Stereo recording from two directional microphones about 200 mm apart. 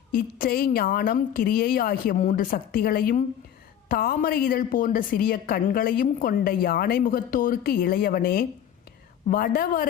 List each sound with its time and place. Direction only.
0.1 s a woman's voice: 45° left (ahead or behind)